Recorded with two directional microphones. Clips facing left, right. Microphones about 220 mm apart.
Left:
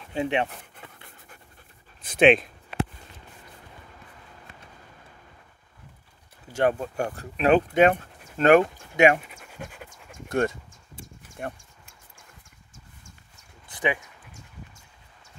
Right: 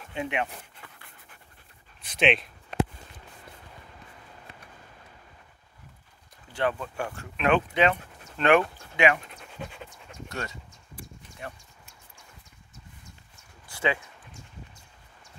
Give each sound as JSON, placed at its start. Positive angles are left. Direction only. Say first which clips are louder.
{"t": 0.1, "sound": "speech", "louder": "left 5 dB", "side_deg": 30}
{"t": 2.0, "sound": "speech", "louder": "left 7 dB", "side_deg": 50}
{"t": 6.5, "sound": "a sound", "louder": "left 7 dB", "side_deg": 45}
{"t": 6.8, "sound": "speech", "louder": "left 5 dB", "side_deg": 40}
{"t": 9.2, "sound": "pant", "louder": "even", "side_deg": 10}
{"t": 10.1, "sound": "a sound", "louder": "left 11 dB", "side_deg": 50}
{"t": 11.3, "sound": "speech", "louder": "left 6 dB", "side_deg": 50}
{"t": 13.7, "sound": "dog", "louder": "left 1 dB", "side_deg": 20}